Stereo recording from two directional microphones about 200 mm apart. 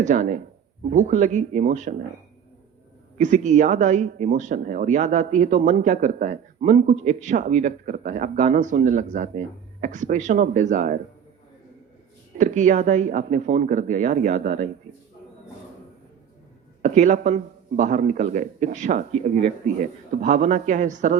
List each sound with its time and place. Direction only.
0.0 s speech: 40° right (ahead or behind)
3.2 s speech: 35° right (ahead or behind)
12.4 s speech: 40° right (ahead or behind)
16.8 s speech: 40° right (ahead or behind)